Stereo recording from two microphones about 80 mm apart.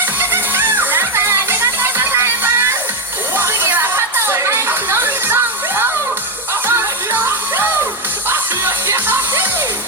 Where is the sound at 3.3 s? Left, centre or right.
Right.